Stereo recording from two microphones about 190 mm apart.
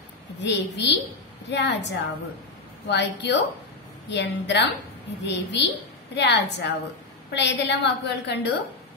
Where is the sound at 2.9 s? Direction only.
65° left (ahead or behind).